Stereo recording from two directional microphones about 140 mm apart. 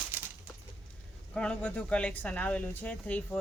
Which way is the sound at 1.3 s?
5° left (ahead or behind).